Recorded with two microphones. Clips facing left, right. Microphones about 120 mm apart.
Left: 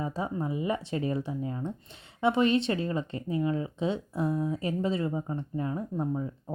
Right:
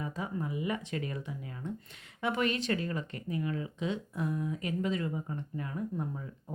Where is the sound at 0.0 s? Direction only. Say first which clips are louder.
Left 5 dB; 30° left (ahead or behind).